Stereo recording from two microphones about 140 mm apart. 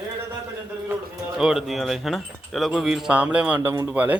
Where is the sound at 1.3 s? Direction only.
5° right (ahead or behind).